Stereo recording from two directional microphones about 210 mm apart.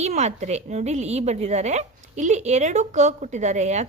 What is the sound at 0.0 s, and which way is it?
A woman's voice, 30° right (ahead or behind).